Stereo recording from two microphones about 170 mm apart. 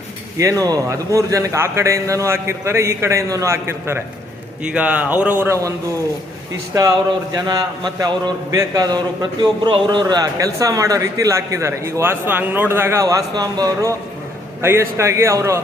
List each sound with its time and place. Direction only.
0.3 s a man's voice: 20° right (ahead or behind)
7.3 s a man's voice: 20° right (ahead or behind)